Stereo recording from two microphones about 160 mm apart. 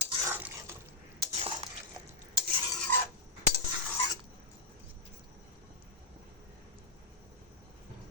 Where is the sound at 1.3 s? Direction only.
40° right (ahead or behind).